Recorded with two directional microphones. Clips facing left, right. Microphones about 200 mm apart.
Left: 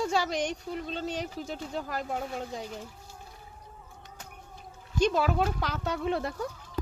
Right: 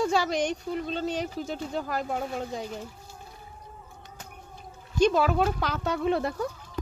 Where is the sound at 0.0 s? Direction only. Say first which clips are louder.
Right 3 dB; 75° right (ahead or behind).